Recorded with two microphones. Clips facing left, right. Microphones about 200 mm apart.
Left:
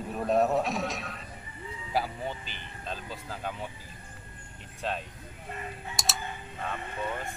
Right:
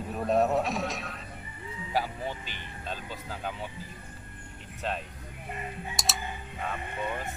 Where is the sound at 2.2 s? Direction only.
Centre (ahead or behind).